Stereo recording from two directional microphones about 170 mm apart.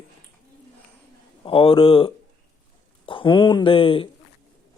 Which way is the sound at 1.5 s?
30° left (ahead or behind).